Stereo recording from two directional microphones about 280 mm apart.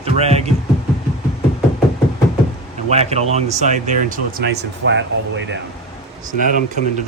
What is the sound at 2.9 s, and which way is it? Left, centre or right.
Speech, right.